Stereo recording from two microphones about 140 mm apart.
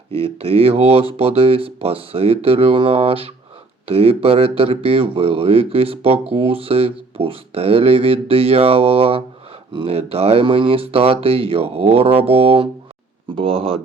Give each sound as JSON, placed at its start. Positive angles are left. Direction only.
{"t": 0.1, "sound": "speech", "side_deg": -45}